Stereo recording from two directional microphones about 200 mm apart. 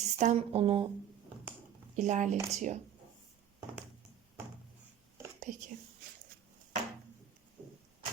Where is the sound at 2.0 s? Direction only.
35° right (ahead or behind).